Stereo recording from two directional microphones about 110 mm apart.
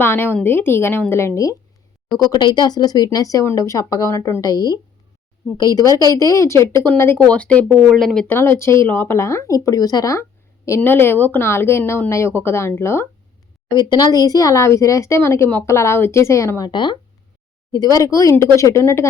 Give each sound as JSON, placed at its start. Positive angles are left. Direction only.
{"t": 0.0, "sound": "speech", "side_deg": 20}
{"t": 2.0, "sound": "speech", "side_deg": 35}
{"t": 8.3, "sound": "speech", "side_deg": 20}
{"t": 10.8, "sound": "speech", "side_deg": 20}
{"t": 13.7, "sound": "speech", "side_deg": 35}